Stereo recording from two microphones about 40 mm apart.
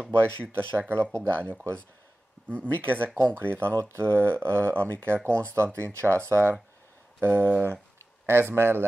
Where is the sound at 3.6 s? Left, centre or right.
Right.